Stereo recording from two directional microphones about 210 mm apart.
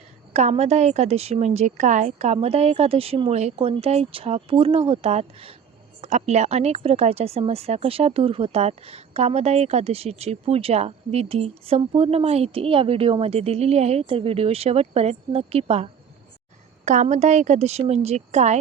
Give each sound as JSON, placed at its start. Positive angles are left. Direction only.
{"t": 0.3, "sound": "a woman's voice", "side_deg": -30}